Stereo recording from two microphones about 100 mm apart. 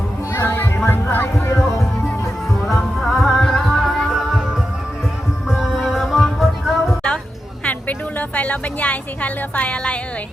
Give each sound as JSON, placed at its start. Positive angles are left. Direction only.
{"t": 0.3, "sound": "music", "side_deg": 25}
{"t": 2.6, "sound": "music", "side_deg": 0}
{"t": 5.5, "sound": "music", "side_deg": -5}
{"t": 7.6, "sound": "a sound", "side_deg": 15}
{"t": 8.4, "sound": "speech", "side_deg": 15}